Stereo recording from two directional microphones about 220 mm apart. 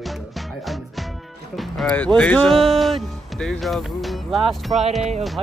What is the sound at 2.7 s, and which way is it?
Music, centre (ahead or behind).